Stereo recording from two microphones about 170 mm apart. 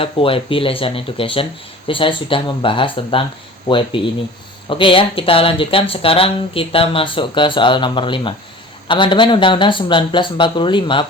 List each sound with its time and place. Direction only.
0.0 s speech: 30° left (ahead or behind)